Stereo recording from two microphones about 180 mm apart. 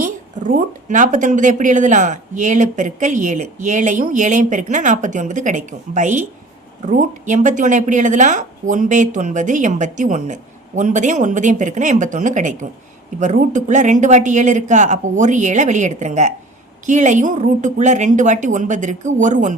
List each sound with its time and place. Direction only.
0.0 s speech: 45° right (ahead or behind)